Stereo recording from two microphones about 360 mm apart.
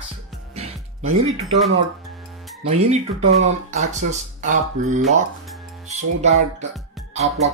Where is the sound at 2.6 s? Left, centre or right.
Centre.